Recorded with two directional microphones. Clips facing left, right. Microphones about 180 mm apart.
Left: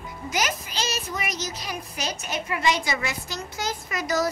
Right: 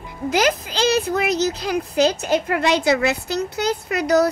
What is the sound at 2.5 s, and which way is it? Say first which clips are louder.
Speech: right 5 dB; 65° right (ahead or behind).